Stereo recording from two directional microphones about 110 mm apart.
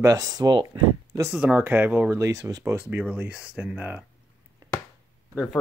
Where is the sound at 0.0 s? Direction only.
35° right (ahead or behind).